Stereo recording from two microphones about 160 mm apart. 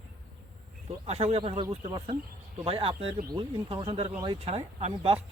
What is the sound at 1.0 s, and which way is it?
Speech, 40° right (ahead or behind).